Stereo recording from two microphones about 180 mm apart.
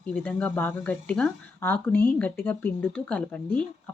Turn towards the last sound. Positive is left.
turn(degrees=5)  # may be behind; listen again after turning